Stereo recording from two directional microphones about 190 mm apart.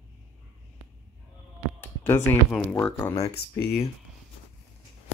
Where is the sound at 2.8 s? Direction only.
15° left (ahead or behind).